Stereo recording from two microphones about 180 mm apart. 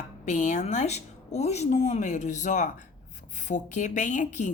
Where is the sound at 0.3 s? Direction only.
45° left (ahead or behind).